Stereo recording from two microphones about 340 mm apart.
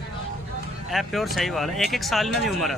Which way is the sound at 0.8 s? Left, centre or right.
Centre.